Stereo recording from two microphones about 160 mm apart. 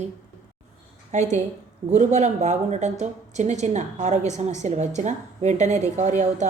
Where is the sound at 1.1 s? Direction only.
45° right (ahead or behind).